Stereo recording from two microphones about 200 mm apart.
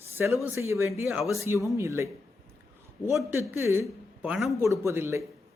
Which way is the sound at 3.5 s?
10° right (ahead or behind).